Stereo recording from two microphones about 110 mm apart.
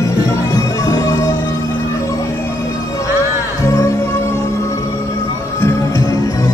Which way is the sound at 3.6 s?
30° left (ahead or behind).